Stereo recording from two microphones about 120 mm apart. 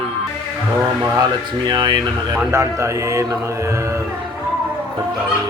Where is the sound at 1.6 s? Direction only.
35° right (ahead or behind).